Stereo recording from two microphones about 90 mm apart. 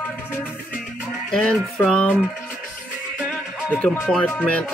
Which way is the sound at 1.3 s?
5° left (ahead or behind).